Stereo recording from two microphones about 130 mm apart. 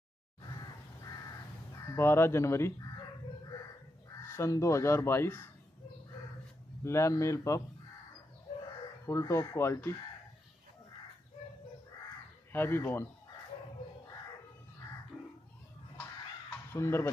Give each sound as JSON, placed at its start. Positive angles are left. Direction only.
{"t": 0.4, "sound": "crow", "side_deg": 30}
{"t": 1.9, "sound": "speech", "side_deg": 20}
{"t": 4.2, "sound": "speech", "side_deg": 20}
{"t": 6.8, "sound": "speech", "side_deg": 20}
{"t": 9.0, "sound": "speech", "side_deg": 20}
{"t": 12.5, "sound": "speech", "side_deg": 15}
{"t": 16.7, "sound": "speech", "side_deg": 20}